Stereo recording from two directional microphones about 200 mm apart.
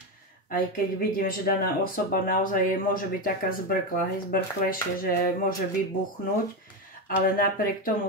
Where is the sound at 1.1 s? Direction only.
45° left (ahead or behind).